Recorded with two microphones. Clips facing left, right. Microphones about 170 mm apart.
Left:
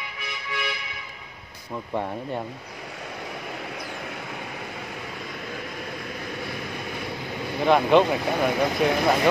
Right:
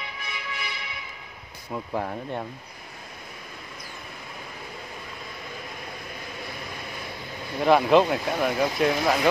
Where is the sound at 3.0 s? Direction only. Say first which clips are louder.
Left 9 dB; 80° left.